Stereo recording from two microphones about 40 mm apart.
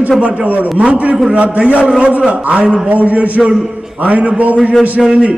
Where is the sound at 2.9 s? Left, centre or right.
Right.